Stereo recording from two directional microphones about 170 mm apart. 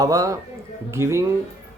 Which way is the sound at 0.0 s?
20° right (ahead or behind).